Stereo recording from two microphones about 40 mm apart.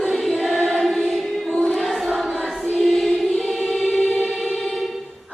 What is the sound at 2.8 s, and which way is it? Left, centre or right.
Choir, centre.